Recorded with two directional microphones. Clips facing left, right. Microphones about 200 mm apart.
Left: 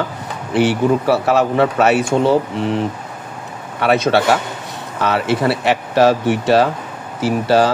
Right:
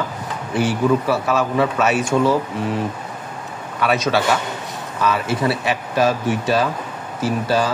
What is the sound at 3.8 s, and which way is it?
Speech, 60° left (ahead or behind).